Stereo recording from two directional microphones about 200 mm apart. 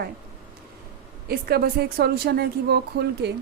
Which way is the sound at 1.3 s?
50° right (ahead or behind).